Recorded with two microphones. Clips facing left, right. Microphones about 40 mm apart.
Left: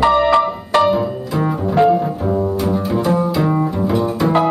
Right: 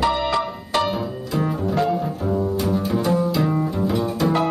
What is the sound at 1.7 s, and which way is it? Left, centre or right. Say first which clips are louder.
Double bass: left 11 dB; left.